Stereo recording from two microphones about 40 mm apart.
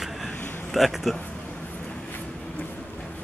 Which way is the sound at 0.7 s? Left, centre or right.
Centre.